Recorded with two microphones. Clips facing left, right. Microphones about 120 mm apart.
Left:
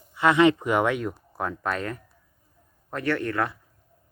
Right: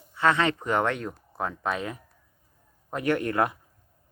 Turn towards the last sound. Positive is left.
turn(degrees=-20)  # may be behind; listen again after turning